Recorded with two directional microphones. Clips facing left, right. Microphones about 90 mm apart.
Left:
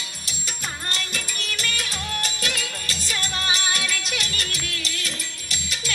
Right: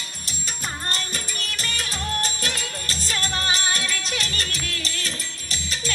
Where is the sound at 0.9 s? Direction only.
40° right (ahead or behind).